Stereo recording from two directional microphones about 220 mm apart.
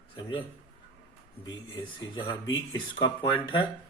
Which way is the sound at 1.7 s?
20° left (ahead or behind).